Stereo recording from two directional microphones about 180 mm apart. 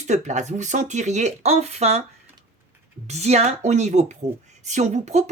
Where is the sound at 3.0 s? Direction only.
40° right (ahead or behind).